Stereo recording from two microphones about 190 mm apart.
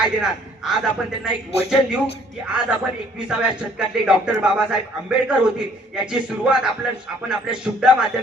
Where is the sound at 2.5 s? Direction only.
5° right (ahead or behind).